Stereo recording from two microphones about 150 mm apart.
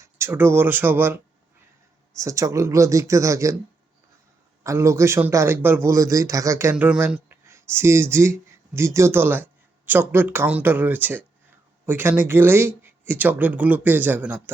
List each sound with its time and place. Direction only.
0.0 s speech: 15° right (ahead or behind)
4.6 s a man's voice: 20° right (ahead or behind)